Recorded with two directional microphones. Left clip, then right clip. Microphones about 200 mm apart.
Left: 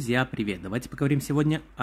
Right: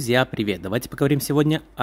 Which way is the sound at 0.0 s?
15° right (ahead or behind).